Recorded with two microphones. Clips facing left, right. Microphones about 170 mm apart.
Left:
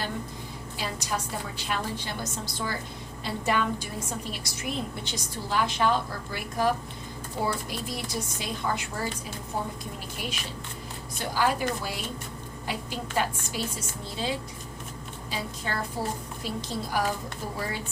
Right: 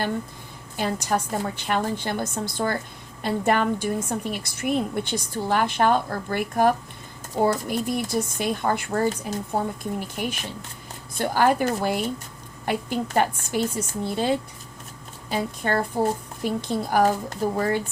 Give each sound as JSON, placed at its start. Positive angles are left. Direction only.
{"t": 0.8, "sound": "a woman's voice", "side_deg": -55}